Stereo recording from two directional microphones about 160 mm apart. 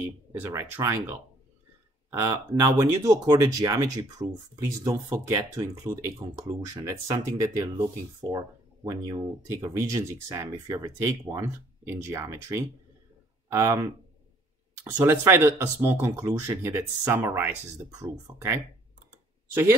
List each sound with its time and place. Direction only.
0.3 s speech: 10° right (ahead or behind)